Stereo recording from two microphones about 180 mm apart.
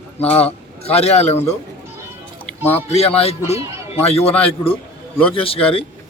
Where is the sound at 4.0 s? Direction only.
35° left (ahead or behind).